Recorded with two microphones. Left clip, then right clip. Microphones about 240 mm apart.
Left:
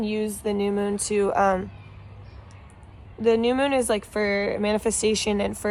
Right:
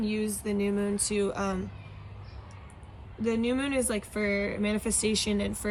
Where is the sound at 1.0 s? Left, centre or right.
Left.